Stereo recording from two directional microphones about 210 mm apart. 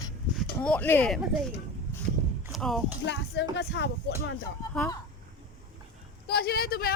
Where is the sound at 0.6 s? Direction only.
5° left (ahead or behind).